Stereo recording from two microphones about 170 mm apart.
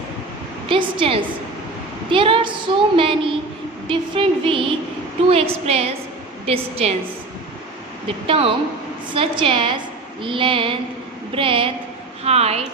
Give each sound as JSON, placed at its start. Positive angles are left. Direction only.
{"t": 0.7, "sound": "a woman's voice", "side_deg": -30}
{"t": 8.0, "sound": "a woman's voice", "side_deg": -30}